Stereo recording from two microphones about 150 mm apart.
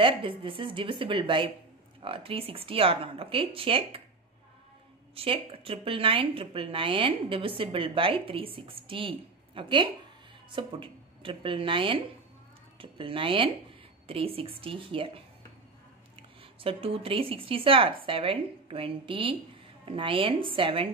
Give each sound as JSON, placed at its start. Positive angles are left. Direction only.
{"t": 0.0, "sound": "a woman's voice", "side_deg": -35}
{"t": 5.1, "sound": "a woman's voice", "side_deg": -40}
{"t": 16.6, "sound": "a woman's voice", "side_deg": -40}